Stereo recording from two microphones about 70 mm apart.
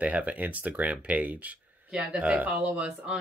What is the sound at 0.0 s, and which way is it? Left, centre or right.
Speech, right.